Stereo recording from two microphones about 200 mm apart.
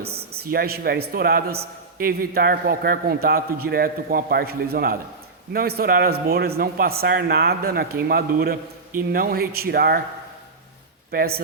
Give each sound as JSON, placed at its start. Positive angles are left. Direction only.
{"t": 0.0, "sound": "a man's voice", "side_deg": -50}
{"t": 11.1, "sound": "a man's voice", "side_deg": -50}